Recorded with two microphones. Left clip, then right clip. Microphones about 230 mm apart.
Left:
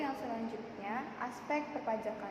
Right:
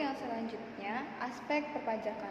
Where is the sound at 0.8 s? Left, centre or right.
Centre.